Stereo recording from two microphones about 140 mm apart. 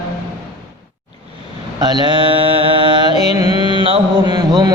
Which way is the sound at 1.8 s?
30° right (ahead or behind).